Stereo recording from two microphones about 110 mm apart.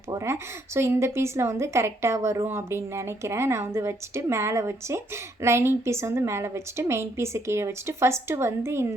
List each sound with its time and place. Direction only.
0.1 s a woman's voice: 25° right (ahead or behind)